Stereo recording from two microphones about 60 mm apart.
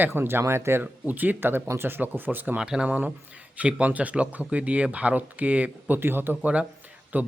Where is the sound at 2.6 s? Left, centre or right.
Centre.